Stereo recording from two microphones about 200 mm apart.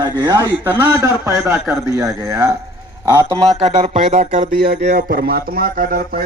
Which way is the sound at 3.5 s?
35° right (ahead or behind).